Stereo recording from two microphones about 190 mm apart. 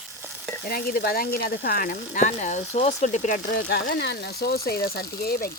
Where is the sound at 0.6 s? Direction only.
50° left (ahead or behind).